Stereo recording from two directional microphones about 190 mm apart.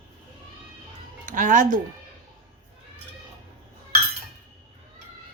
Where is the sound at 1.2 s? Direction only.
40° right (ahead or behind).